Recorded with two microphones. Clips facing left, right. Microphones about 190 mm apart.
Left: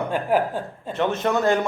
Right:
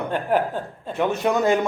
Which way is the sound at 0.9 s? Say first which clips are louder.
Right 1 dB; 10° right (ahead or behind).